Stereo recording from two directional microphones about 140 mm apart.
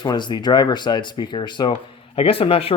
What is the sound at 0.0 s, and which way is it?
Speech, 35° left (ahead or behind).